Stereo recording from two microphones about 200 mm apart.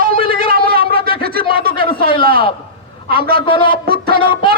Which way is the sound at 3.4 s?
25° left (ahead or behind).